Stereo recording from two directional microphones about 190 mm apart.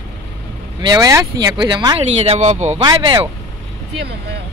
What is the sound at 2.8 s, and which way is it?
Speech, 25° right (ahead or behind).